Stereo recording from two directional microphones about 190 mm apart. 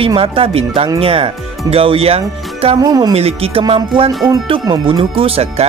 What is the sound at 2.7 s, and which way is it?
Speech, 20° right (ahead or behind).